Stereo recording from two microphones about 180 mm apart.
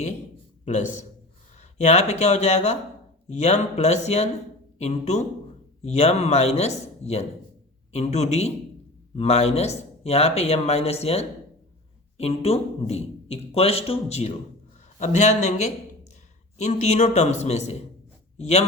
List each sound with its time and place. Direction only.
1.8 s a man's voice: 40° left (ahead or behind)